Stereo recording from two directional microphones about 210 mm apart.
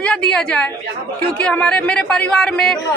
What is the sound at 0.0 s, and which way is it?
A woman's voice, 5° left (ahead or behind).